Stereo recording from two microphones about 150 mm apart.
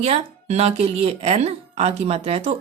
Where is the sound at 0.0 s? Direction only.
45° right (ahead or behind).